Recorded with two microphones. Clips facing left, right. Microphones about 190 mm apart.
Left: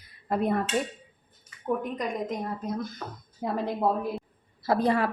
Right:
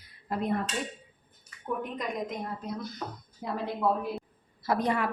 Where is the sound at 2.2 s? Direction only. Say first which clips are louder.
Left 4 dB; 50° left (ahead or behind).